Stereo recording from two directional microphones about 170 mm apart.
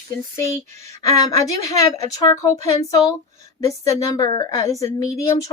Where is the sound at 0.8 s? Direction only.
20° left (ahead or behind).